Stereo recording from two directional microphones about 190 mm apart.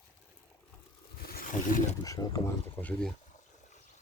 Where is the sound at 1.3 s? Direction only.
50° left (ahead or behind).